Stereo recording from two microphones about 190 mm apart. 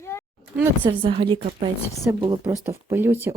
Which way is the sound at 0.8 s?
25° right (ahead or behind).